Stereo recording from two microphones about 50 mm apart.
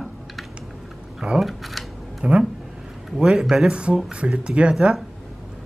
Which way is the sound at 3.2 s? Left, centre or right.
Centre.